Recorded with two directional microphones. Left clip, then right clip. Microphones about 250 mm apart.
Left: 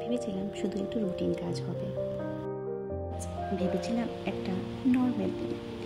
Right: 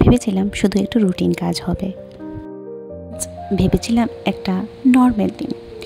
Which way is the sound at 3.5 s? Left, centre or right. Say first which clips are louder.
Right 13 dB; right.